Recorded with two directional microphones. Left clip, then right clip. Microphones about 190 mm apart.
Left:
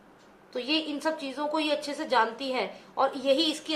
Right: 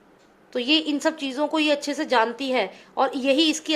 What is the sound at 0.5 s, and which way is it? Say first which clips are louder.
A woman's voice: right 7 dB; 50° right (ahead or behind).